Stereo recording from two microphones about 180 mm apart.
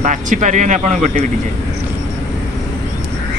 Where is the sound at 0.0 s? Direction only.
45° right (ahead or behind).